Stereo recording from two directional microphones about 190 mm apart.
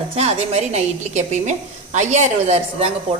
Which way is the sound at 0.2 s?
35° right (ahead or behind).